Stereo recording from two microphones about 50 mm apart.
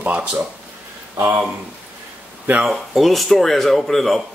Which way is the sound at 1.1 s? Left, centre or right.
Right.